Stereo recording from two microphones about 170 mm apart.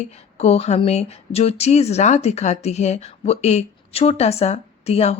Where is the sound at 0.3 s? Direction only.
40° left (ahead or behind).